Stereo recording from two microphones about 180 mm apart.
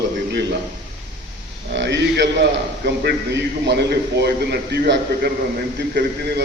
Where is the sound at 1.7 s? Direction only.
75° right (ahead or behind).